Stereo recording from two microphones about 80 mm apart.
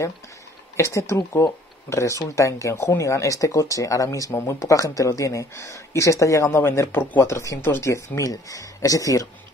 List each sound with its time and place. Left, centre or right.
0.7 s speech: left